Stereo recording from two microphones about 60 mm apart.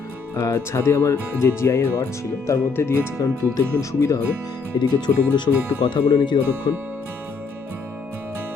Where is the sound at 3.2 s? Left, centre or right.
Left.